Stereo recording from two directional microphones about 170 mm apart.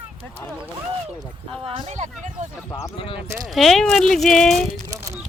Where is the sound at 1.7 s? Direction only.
40° right (ahead or behind).